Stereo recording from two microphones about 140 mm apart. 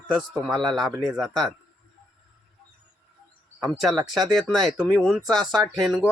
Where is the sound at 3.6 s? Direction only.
Centre (ahead or behind).